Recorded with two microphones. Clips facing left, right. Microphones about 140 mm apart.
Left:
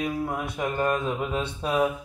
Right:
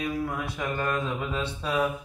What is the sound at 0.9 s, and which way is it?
Mantra, 20° left (ahead or behind).